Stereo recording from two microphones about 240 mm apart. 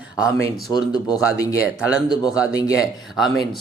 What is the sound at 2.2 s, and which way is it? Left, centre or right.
Speech, centre.